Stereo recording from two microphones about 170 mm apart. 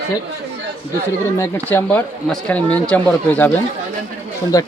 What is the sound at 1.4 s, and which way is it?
Speech, 10° left (ahead or behind).